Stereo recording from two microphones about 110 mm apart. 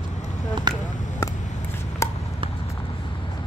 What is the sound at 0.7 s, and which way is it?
Speech, 40° right (ahead or behind).